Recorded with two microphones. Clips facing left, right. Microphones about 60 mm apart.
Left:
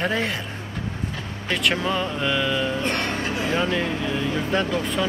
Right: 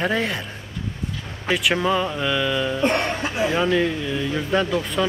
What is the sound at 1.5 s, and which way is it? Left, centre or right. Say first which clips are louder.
Speech: right 3 dB; centre.